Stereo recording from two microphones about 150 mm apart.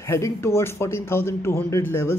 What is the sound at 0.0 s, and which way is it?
Speech, 20° left (ahead or behind).